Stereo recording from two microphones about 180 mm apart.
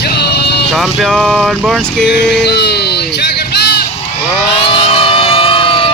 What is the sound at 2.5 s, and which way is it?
Speech, 65° left (ahead or behind).